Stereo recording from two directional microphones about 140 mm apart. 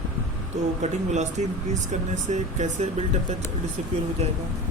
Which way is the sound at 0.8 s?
55° right (ahead or behind).